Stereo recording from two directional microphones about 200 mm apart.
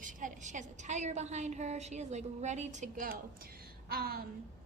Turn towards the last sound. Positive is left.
turn(degrees=-50)  # may be behind; listen again after turning